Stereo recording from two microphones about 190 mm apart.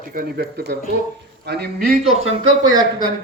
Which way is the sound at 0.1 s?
55° right (ahead or behind).